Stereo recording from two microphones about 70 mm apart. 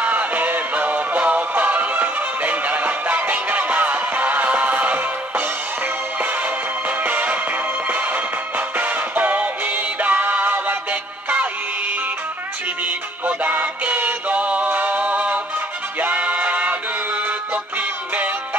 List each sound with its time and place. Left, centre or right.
0.0 s music: right
7.0 s music: right
13.4 s music: right
18.1 s music: right